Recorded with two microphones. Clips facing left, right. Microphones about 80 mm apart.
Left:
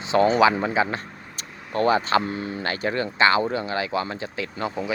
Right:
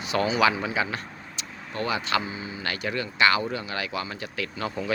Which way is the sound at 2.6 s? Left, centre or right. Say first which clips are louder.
Left 4 dB; left.